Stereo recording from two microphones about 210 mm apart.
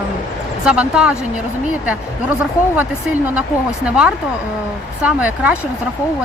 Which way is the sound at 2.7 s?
10° right (ahead or behind).